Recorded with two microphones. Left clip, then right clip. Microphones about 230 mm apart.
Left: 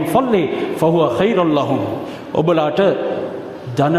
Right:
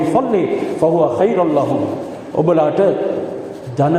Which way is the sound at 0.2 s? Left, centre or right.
Left.